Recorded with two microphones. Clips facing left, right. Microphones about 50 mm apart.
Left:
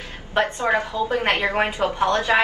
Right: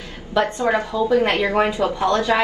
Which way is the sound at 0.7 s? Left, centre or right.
Left.